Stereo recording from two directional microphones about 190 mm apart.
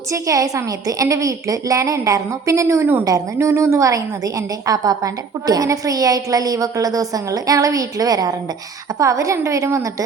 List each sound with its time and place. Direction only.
0.1 s a woman's voice: 15° right (ahead or behind)